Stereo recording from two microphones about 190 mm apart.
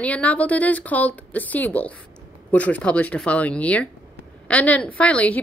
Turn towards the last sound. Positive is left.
turn(degrees=5)  # may be behind; listen again after turning